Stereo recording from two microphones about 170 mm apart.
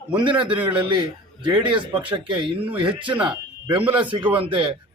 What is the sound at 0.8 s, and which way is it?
Speech, 30° right (ahead or behind).